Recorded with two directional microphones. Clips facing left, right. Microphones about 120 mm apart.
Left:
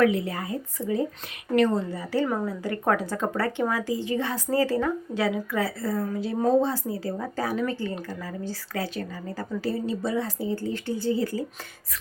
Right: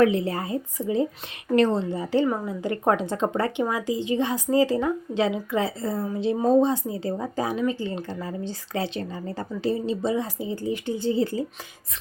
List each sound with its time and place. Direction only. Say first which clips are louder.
0.0 s speech: right 2 dB; 25° right (ahead or behind)
2.2 s a woman's voice: right 2 dB; 10° right (ahead or behind)
2.5 s speech: right 2 dB; 20° right (ahead or behind)